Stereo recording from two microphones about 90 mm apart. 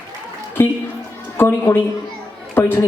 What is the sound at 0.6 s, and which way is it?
A woman's voice, 25° left (ahead or behind).